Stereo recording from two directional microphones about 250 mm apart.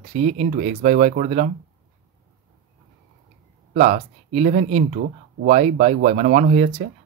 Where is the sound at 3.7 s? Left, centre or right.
Right.